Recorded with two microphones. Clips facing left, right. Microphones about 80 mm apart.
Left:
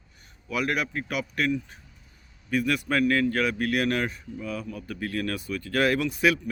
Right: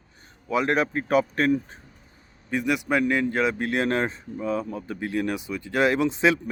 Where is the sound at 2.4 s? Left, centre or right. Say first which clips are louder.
Right 1 dB; right.